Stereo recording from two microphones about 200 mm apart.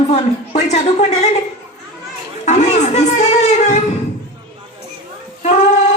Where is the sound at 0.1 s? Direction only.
35° left (ahead or behind).